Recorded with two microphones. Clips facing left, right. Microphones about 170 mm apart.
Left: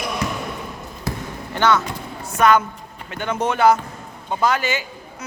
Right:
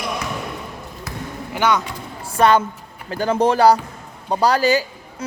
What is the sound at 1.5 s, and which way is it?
Speech, 10° right (ahead or behind).